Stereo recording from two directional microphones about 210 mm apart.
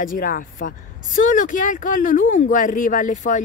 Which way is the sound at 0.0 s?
40° left (ahead or behind).